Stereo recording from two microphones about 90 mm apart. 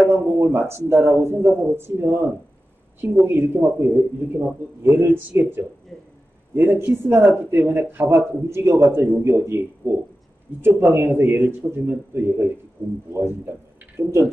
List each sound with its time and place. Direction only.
0.1 s speech: 25° right (ahead or behind)